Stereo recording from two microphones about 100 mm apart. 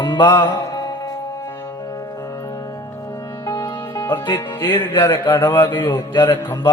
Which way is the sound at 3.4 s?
45° left (ahead or behind).